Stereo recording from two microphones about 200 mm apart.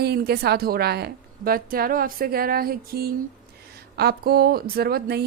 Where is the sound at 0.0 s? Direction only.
50° right (ahead or behind).